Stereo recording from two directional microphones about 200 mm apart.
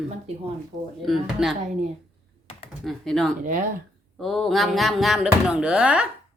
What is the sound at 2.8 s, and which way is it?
Speech, centre (ahead or behind).